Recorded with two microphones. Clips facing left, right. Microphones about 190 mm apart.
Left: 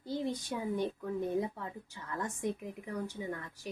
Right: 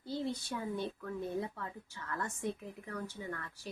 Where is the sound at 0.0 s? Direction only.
15° left (ahead or behind).